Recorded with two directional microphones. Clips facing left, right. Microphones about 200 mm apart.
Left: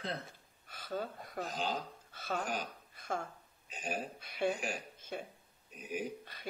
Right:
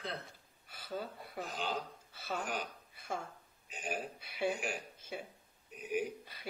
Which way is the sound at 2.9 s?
10° right (ahead or behind).